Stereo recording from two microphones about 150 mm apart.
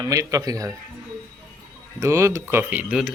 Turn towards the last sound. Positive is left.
turn(degrees=-5)  # may be behind; listen again after turning